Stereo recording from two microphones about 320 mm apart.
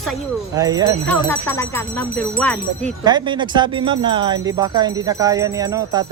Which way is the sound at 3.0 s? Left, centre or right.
Centre.